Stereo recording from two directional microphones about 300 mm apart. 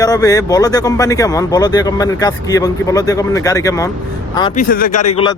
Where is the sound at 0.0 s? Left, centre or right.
Centre.